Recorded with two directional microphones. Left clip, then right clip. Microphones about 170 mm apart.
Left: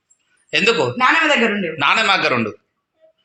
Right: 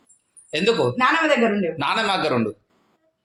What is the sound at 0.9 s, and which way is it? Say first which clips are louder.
Speech: left 4 dB; 40° left (ahead or behind).